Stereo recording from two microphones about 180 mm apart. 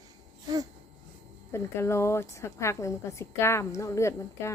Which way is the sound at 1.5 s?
15° left (ahead or behind).